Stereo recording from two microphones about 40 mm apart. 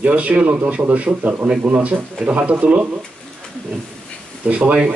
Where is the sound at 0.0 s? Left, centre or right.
Right.